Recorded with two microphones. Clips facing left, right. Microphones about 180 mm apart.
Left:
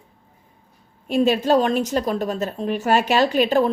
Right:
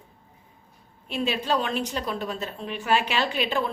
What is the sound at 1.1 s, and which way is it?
A woman's voice, 45° left (ahead or behind).